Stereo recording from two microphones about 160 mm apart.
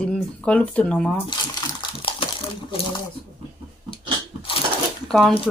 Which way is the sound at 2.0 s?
35° left (ahead or behind).